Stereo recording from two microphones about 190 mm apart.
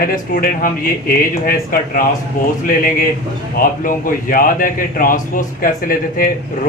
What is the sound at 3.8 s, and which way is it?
A man's voice, 45° left (ahead or behind).